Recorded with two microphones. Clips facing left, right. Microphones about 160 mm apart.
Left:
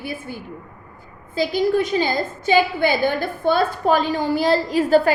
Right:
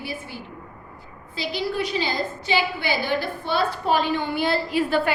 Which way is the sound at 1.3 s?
45° left (ahead or behind).